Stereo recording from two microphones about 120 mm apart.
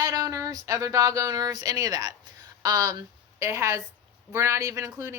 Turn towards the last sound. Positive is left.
turn(degrees=-25)  # may be behind; listen again after turning